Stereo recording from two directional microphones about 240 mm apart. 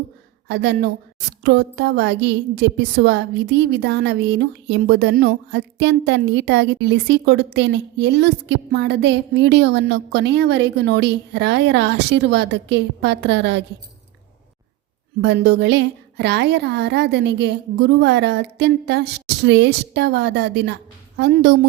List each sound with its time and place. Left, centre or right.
0.4 s a woman's voice: right
15.2 s a woman's voice: right